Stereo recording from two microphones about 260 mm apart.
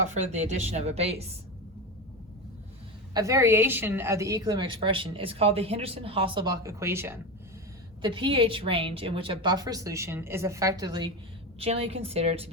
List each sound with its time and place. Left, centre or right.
0.0 s speech: right
3.2 s a woman's voice: centre